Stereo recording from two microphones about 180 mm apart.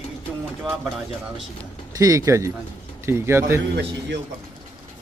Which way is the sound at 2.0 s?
20° right (ahead or behind).